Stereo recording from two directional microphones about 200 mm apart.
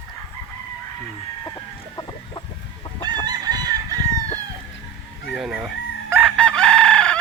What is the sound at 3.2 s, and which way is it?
Chicken, 20° right (ahead or behind).